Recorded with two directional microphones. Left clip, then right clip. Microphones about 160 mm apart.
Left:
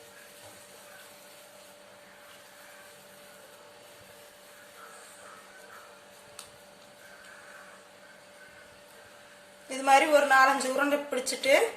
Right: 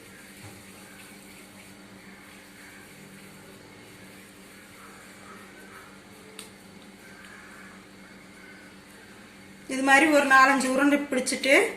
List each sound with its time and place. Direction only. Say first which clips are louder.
9.8 s a woman's voice: right 2 dB; 15° left (ahead or behind)